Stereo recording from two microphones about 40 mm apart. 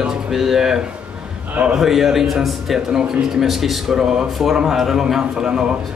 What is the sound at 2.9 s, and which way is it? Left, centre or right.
Speech, centre.